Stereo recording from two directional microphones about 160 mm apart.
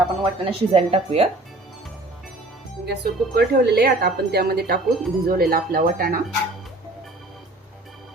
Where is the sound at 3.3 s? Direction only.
75° right (ahead or behind); by 6.2 s 60° right (ahead or behind).